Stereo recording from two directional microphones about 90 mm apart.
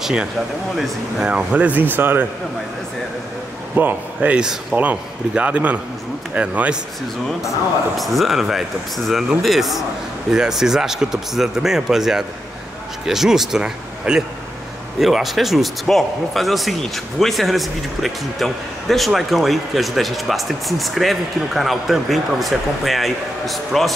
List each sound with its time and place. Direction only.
0.0 s speech: 10° right (ahead or behind)
1.3 s speech: 15° right (ahead or behind)
3.7 s speech: 15° right (ahead or behind)
8.0 s speech: centre (ahead or behind)